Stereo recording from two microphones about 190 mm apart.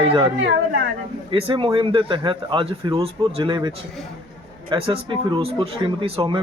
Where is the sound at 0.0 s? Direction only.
30° right (ahead or behind).